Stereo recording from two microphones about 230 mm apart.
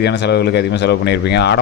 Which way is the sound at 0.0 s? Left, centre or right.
Left.